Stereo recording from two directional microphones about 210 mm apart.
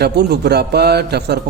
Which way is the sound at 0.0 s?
50° right (ahead or behind).